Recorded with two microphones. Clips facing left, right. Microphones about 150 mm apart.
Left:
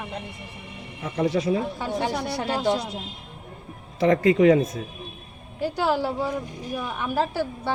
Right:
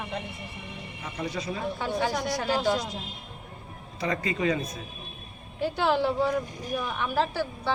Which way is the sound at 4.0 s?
90° left.